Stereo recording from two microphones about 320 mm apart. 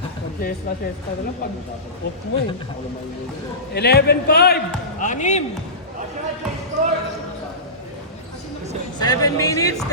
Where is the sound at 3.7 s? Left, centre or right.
Left.